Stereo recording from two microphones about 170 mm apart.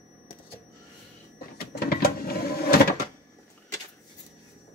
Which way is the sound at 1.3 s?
60° left (ahead or behind).